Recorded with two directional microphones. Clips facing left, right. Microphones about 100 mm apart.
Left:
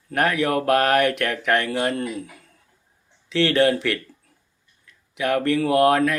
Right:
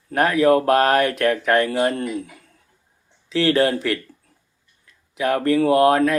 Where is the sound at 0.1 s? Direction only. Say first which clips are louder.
Right 5 dB; 25° right (ahead or behind).